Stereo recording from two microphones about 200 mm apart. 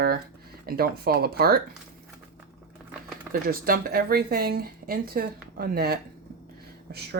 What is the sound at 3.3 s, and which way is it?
Speech, 45° right (ahead or behind).